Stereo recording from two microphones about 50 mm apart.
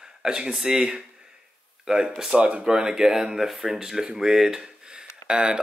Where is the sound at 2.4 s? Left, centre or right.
Right.